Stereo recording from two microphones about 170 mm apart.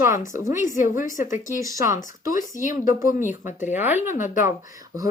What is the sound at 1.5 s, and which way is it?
Speech, 20° right (ahead or behind).